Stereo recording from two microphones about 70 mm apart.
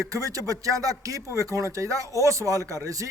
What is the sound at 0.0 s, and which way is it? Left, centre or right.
Speech, right.